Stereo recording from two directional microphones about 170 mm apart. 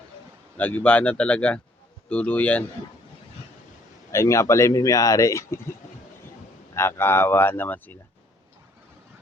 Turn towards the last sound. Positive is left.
turn(degrees=10)  # may be behind; listen again after turning